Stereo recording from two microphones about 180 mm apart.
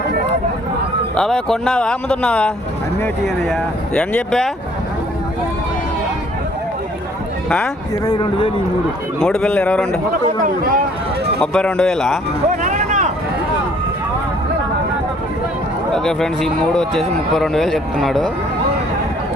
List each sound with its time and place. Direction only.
1.1 s speech: 5° left (ahead or behind)
3.5 s speech: 5° left (ahead or behind)
8.0 s a man's voice: 25° left (ahead or behind)
9.2 s speech: 5° left (ahead or behind)
10.4 s speech: 50° right (ahead or behind)
11.3 s speech: 5° left (ahead or behind)
12.6 s vehicle: 40° right (ahead or behind)
15.9 s speech: centre (ahead or behind)